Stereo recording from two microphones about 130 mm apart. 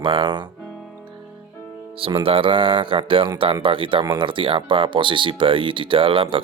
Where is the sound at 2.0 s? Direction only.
45° right (ahead or behind).